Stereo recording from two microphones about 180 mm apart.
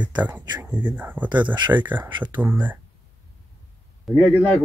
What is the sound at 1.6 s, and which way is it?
Speech, 25° right (ahead or behind).